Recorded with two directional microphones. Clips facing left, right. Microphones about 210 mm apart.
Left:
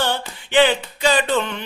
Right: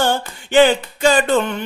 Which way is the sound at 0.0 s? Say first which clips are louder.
Right 4 dB; 45° right (ahead or behind).